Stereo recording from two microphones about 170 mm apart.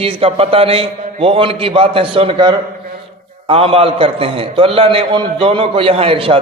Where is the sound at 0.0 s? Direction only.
35° right (ahead or behind).